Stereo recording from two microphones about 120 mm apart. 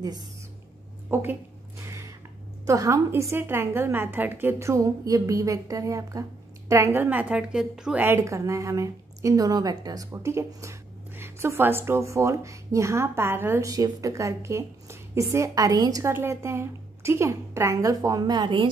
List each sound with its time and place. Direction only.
1.1 s a woman's voice: 20° right (ahead or behind)
1.8 s a sound: 25° right (ahead or behind)
2.6 s a woman's voice: 25° right (ahead or behind); by 8.0 s 5° right (ahead or behind)
8.0 s a woman's voice: 20° right (ahead or behind)
13.7 s a woman's voice: 30° right (ahead or behind)